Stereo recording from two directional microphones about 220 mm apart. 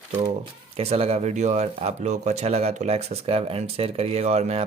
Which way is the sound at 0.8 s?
25° right (ahead or behind).